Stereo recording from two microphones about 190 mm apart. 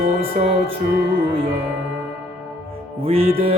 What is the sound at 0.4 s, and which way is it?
Music, 35° right (ahead or behind).